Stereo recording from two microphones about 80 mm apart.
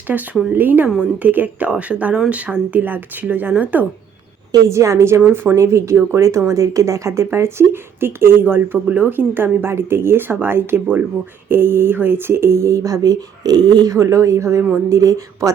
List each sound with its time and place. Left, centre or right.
0.1 s a woman's voice: centre
4.5 s speech: right
5.2 s speech: right